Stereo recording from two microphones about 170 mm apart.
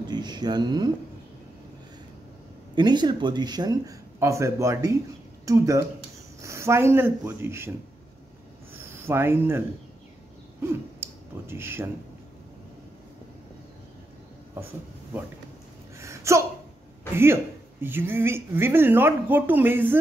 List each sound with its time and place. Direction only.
0.0 s speech: 25° right (ahead or behind)
2.7 s speech: 25° right (ahead or behind)
8.7 s speech: 15° right (ahead or behind)
16.0 s gasp: 15° right (ahead or behind)
17.1 s speech: 15° right (ahead or behind)